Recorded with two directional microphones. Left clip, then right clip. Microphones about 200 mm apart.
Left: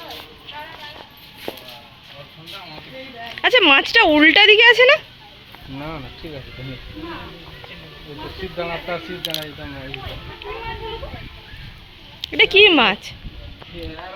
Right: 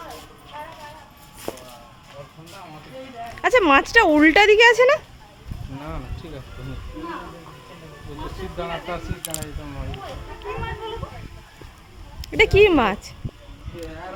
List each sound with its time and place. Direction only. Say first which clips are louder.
3.3 s speech: left 3 dB; 5° right (ahead or behind)
8.5 s speech: left 3 dB; 35° left (ahead or behind)
12.2 s speech: left 3 dB; 10° right (ahead or behind)